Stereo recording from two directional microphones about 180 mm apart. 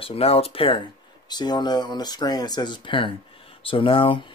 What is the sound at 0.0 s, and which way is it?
Speech, 35° left (ahead or behind).